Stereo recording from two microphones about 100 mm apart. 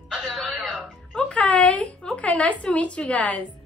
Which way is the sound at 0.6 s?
5° right (ahead or behind).